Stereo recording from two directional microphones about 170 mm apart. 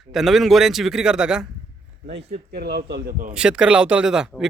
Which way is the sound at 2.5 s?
75° right (ahead or behind).